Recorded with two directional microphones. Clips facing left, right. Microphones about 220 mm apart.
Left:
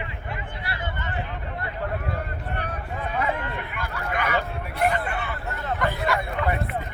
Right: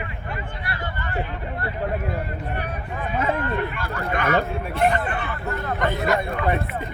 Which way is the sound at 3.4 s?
15° left (ahead or behind).